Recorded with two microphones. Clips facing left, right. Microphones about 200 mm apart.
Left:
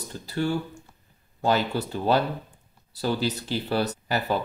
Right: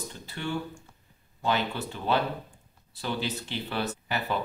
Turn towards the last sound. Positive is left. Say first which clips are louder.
# left 4 dB
turn(degrees=40)  # may be behind; listen again after turning